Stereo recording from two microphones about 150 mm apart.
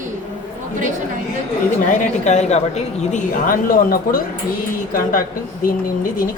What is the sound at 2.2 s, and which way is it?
A woman's voice, 50° left (ahead or behind).